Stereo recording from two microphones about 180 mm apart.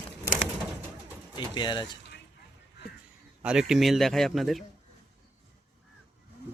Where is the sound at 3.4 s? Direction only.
5° right (ahead or behind).